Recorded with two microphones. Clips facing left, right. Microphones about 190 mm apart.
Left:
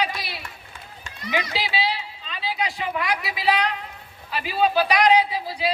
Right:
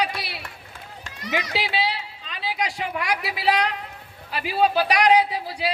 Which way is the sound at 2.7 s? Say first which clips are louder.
Left 1 dB; 65° right (ahead or behind).